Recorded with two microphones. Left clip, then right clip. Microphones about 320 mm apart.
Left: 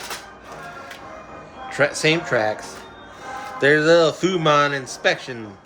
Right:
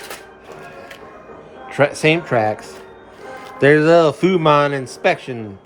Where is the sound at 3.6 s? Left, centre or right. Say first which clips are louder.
Right 3 dB; centre.